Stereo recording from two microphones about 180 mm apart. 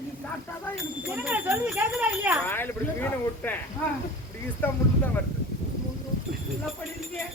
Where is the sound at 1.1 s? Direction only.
10° right (ahead or behind).